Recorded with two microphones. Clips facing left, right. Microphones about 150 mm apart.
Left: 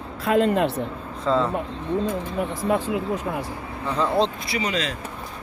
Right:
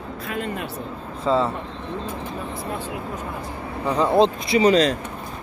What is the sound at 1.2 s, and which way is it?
Speech, 5° right (ahead or behind).